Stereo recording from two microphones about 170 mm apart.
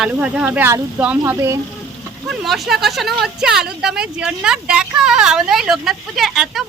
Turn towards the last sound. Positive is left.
turn(degrees=0)  # may be behind; listen again after turning